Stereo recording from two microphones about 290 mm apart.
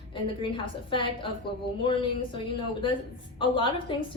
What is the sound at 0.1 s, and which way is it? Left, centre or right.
A woman's voice, centre.